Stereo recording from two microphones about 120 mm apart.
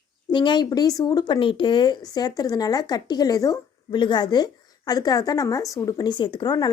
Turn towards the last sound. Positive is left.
turn(degrees=35)  # may be behind; listen again after turning